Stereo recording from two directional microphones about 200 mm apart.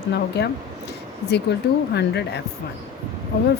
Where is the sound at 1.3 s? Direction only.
55° left (ahead or behind).